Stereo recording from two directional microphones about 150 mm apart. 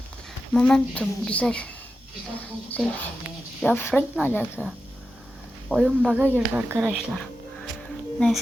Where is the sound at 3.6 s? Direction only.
15° left (ahead or behind).